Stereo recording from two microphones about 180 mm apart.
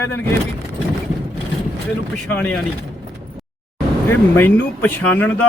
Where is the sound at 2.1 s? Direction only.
10° left (ahead or behind).